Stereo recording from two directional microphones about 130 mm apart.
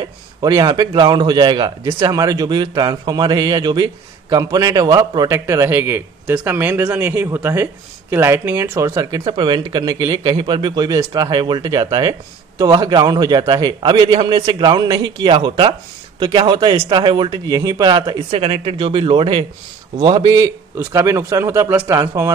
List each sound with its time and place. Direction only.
0.4 s a man's voice: 30° right (ahead or behind)
9.2 s a man's voice: 40° right (ahead or behind)
18.3 s a man's voice: 50° right (ahead or behind); by 22.3 s 25° right (ahead or behind)